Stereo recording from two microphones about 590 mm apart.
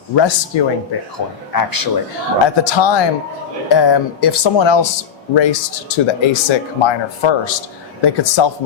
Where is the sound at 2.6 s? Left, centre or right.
Left.